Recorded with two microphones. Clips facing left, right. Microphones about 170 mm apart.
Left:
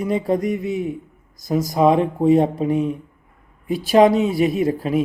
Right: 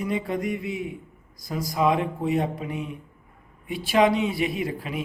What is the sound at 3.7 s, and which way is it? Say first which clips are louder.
Speech: left 7 dB; 40° left (ahead or behind).